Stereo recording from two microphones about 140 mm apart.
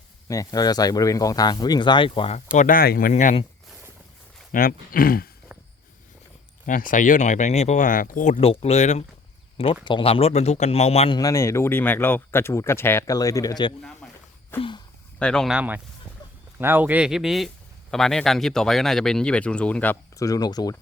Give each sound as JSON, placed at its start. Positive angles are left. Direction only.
{"t": 0.3, "sound": "speech", "side_deg": 25}
{"t": 2.5, "sound": "speech", "side_deg": 75}
{"t": 4.5, "sound": "speech", "side_deg": 90}
{"t": 6.7, "sound": "speech", "side_deg": 75}
{"t": 8.6, "sound": "speech", "side_deg": 55}
{"t": 9.8, "sound": "speech", "side_deg": 40}
{"t": 11.2, "sound": "speech", "side_deg": 20}
{"t": 14.0, "sound": "a sound", "side_deg": 5}
{"t": 14.5, "sound": "speech", "side_deg": 15}
{"t": 15.2, "sound": "speech", "side_deg": 5}
{"t": 15.5, "sound": "speech", "side_deg": -10}
{"t": 20.1, "sound": "speech", "side_deg": 25}